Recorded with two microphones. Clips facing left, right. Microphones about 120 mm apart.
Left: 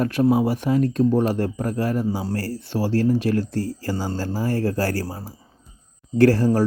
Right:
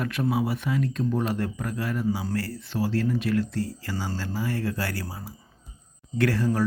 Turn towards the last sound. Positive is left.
turn(degrees=35)  # may be behind; listen again after turning